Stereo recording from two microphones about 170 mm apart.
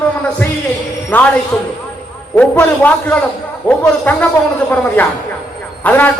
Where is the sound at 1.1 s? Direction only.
10° left (ahead or behind).